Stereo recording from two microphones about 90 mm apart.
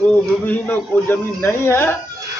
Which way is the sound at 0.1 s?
20° left (ahead or behind).